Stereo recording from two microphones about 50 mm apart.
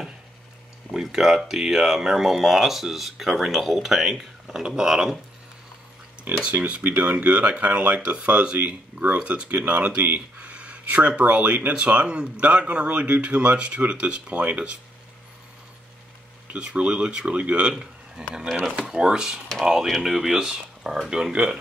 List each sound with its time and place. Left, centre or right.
0.9 s speech: centre
6.4 s speech: right
16.5 s speech: right